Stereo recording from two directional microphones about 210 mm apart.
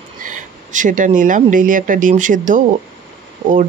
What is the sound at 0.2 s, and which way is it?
Speech, 40° right (ahead or behind).